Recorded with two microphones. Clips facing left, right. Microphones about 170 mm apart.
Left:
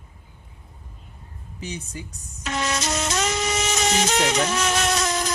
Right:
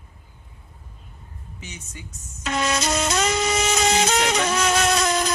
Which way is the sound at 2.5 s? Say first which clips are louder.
Right 3 dB; 90° right.